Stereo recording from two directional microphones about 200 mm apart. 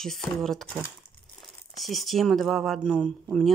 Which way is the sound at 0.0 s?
Centre (ahead or behind).